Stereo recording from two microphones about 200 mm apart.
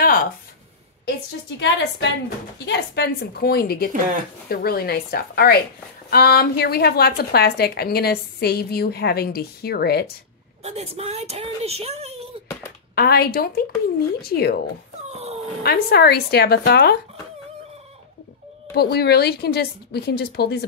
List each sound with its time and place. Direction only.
0.0 s a sound: 45° left (ahead or behind)
1.6 s a woman's voice: 60° left (ahead or behind)
10.6 s a woman's voice: 30° right (ahead or behind)
12.9 s a woman's voice: 50° left (ahead or behind)
15.0 s dog: 30° right (ahead or behind)
15.6 s a woman's voice: 55° left (ahead or behind)
18.7 s a woman's voice: 55° left (ahead or behind)